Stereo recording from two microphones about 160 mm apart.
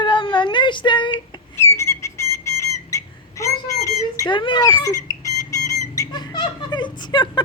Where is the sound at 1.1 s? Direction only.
15° left (ahead or behind).